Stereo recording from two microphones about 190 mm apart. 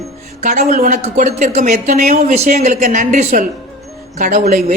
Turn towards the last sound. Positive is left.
turn(degrees=-35)  # may be behind; listen again after turning